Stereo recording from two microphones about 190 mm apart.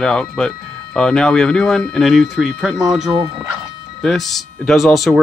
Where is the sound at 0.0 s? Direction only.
5° left (ahead or behind).